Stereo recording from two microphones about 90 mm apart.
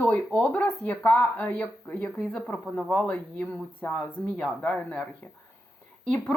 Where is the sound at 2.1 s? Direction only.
5° left (ahead or behind).